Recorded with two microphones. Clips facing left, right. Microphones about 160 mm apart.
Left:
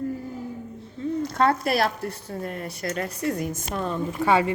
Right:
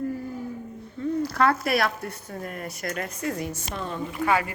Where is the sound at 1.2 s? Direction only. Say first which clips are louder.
Left 1 dB; 25° left (ahead or behind).